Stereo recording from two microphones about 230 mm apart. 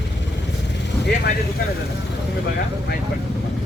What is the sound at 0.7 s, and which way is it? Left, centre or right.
Speech, left.